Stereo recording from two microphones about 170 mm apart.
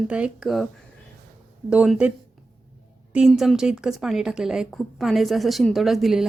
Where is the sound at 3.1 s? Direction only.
5° right (ahead or behind).